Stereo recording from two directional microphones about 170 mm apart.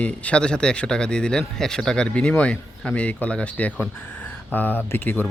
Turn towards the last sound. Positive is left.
turn(degrees=10)  # may be behind; listen again after turning